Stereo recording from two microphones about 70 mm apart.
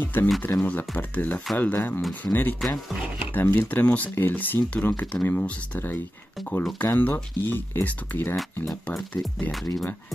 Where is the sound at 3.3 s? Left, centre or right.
Left.